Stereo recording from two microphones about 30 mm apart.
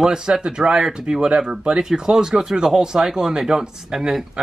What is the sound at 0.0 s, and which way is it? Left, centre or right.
Speech, centre.